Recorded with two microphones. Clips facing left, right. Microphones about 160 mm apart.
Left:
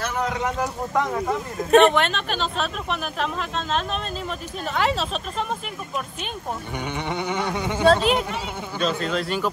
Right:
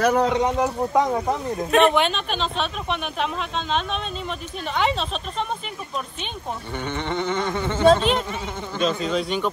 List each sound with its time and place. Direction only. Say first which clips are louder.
0.0 s speech: right 8 dB; 40° right (ahead or behind)
0.3 s speech: right 5 dB; 25° right (ahead or behind)
1.8 s speech: left 1 dB; centre (ahead or behind)
6.8 s a sound: right 3 dB; 10° left (ahead or behind)
8.7 s speech: right 2 dB; centre (ahead or behind)